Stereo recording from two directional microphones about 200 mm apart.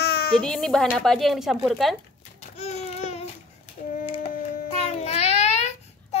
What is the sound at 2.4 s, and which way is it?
Babbling, 35° left (ahead or behind).